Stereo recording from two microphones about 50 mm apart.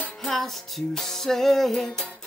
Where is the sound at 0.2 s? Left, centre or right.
Centre.